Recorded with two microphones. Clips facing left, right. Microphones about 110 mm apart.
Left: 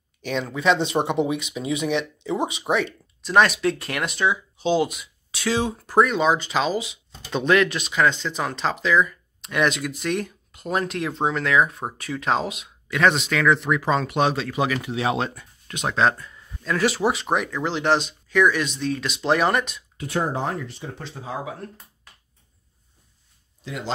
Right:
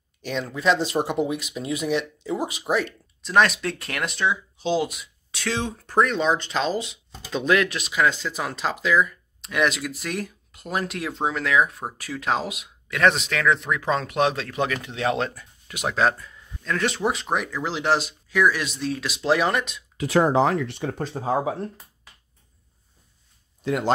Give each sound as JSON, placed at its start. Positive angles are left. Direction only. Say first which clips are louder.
{"t": 0.6, "sound": "speech", "louder": "left 1 dB", "side_deg": 0}
{"t": 20.0, "sound": "speech", "louder": "right 6 dB", "side_deg": -90}
{"t": 21.0, "sound": "speech", "louder": "right 8 dB", "side_deg": -40}
{"t": 23.6, "sound": "a man's voice", "louder": "right 8 dB", "side_deg": -55}